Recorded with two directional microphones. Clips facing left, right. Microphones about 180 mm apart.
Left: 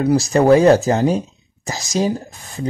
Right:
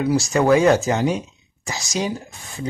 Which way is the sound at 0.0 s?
35° left (ahead or behind).